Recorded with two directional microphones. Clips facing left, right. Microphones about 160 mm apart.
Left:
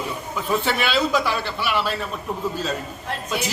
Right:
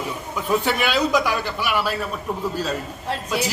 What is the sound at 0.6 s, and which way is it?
A man's voice, 10° right (ahead or behind).